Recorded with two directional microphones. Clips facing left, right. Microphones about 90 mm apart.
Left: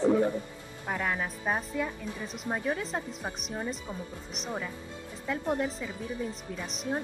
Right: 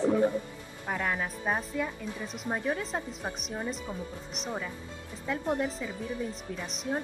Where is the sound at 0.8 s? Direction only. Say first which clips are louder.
Even; centre (ahead or behind).